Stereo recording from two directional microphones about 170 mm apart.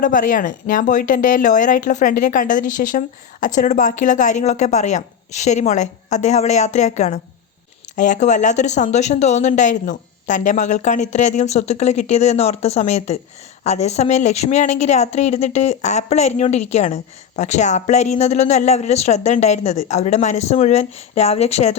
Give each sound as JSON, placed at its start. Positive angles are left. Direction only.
{"t": 0.0, "sound": "a woman's voice", "side_deg": 50}